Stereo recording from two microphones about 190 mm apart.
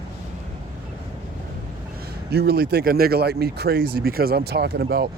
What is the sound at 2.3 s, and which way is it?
Speech, 55° right (ahead or behind).